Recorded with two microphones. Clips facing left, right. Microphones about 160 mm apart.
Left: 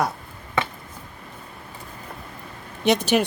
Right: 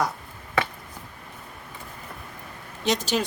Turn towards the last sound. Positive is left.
turn(degrees=60)  # may be behind; listen again after turning